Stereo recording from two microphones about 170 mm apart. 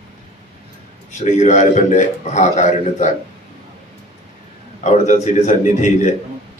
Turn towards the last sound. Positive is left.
turn(degrees=45)  # may be behind; listen again after turning